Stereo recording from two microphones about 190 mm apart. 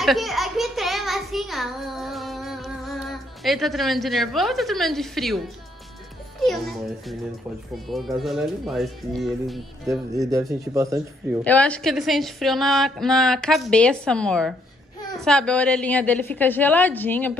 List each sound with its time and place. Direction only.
0.0 s a sound: centre (ahead or behind)
6.4 s a woman's voice: centre (ahead or behind)
9.8 s speech: 15° right (ahead or behind)
11.4 s a woman's voice: 5° left (ahead or behind)